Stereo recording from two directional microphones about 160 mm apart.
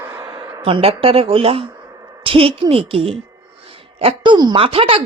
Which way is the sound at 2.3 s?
35° right (ahead or behind).